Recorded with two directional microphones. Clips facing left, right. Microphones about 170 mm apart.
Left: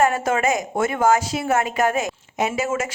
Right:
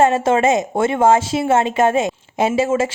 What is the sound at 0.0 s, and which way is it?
A woman's voice, 25° right (ahead or behind).